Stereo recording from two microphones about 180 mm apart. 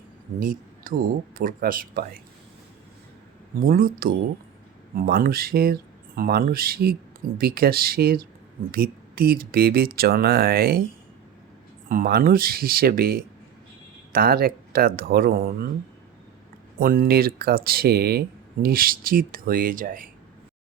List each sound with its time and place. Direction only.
0.3 s speech: 50° right (ahead or behind)
3.7 s speech: 55° right (ahead or behind)
11.9 s speech: 55° right (ahead or behind)
16.7 s speech: 50° right (ahead or behind)